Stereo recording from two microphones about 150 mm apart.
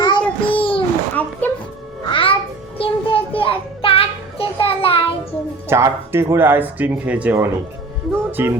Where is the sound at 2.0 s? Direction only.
35° left (ahead or behind).